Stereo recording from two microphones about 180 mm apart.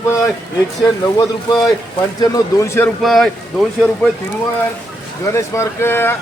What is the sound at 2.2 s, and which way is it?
Speech, 20° left (ahead or behind).